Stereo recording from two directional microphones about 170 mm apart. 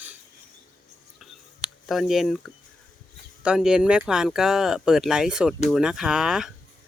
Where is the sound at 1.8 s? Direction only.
Centre (ahead or behind).